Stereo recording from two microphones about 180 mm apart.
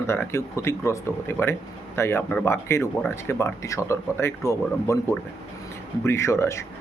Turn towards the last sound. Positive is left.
turn(degrees=15)  # may be behind; listen again after turning